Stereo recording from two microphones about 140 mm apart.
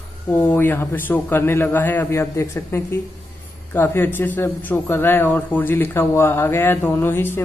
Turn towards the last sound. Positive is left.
turn(degrees=15)  # may be behind; listen again after turning